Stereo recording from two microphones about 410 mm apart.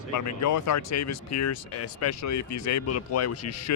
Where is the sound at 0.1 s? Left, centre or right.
Left.